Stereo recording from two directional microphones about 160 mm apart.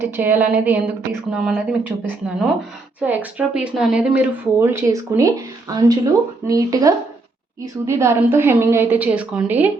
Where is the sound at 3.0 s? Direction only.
10° right (ahead or behind).